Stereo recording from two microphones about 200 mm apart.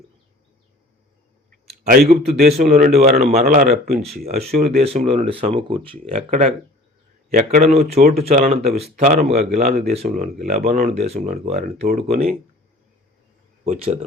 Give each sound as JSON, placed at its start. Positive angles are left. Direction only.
{"t": 1.8, "sound": "speech", "side_deg": -45}
{"t": 4.8, "sound": "speech", "side_deg": -30}
{"t": 11.2, "sound": "speech", "side_deg": -45}
{"t": 12.0, "sound": "speech", "side_deg": -35}
{"t": 13.7, "sound": "speech", "side_deg": -35}